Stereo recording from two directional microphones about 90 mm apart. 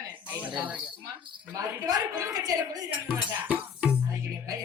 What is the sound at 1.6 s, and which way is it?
A woman's voice, 40° right (ahead or behind).